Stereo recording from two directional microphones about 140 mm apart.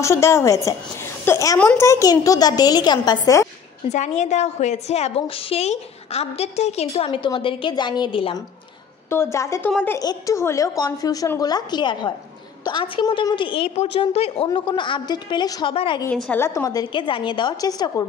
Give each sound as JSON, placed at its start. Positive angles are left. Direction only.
{"t": 0.0, "sound": "a woman's voice", "side_deg": 20}
{"t": 1.6, "sound": "a child's voice", "side_deg": 10}
{"t": 1.9, "sound": "a woman's voice", "side_deg": 25}
{"t": 3.9, "sound": "a woman's voice", "side_deg": 55}
{"t": 9.1, "sound": "a woman's voice", "side_deg": 20}
{"t": 15.7, "sound": "a woman's voice", "side_deg": 40}
{"t": 16.3, "sound": "a woman's voice", "side_deg": 20}